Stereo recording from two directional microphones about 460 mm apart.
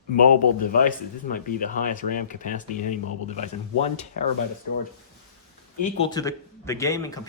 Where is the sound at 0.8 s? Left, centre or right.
Centre.